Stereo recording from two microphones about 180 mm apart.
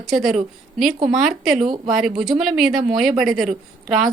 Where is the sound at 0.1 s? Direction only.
Centre (ahead or behind).